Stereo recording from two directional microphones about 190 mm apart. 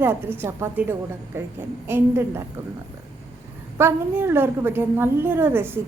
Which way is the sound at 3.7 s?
10° right (ahead or behind).